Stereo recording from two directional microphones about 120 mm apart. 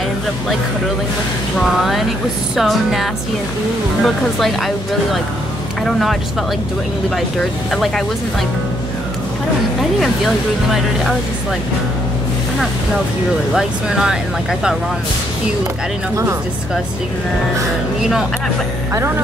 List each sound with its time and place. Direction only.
2.5 s speech: centre (ahead or behind)
7.7 s speech: 5° left (ahead or behind)
9.9 s speech: centre (ahead or behind)
13.6 s speech: 5° right (ahead or behind)